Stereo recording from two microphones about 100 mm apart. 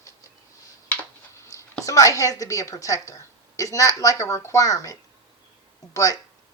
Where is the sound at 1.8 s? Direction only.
35° left (ahead or behind).